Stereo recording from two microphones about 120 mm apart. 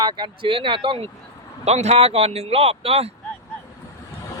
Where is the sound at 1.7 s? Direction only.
65° right (ahead or behind).